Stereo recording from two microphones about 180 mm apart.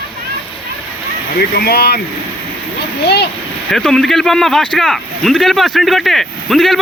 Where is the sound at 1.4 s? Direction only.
60° left (ahead or behind).